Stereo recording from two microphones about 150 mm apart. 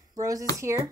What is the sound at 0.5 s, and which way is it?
Speech, 20° right (ahead or behind).